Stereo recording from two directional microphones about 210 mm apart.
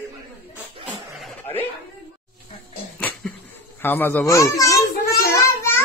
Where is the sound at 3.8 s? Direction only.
10° left (ahead or behind).